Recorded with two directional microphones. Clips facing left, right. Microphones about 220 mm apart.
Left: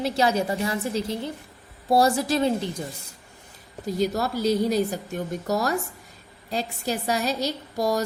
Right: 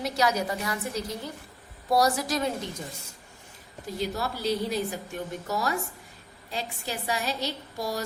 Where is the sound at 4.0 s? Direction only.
45° left (ahead or behind).